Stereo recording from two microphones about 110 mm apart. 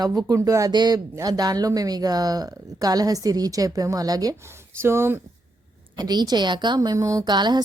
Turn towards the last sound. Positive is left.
turn(degrees=-40)  # may be behind; listen again after turning